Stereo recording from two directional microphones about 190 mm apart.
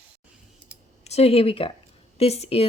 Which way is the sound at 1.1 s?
35° left (ahead or behind).